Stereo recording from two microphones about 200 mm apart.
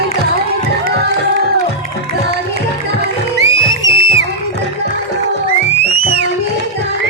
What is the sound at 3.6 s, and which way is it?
Music, 65° right (ahead or behind).